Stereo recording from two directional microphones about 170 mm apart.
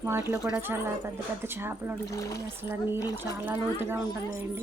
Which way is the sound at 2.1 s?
20° left (ahead or behind).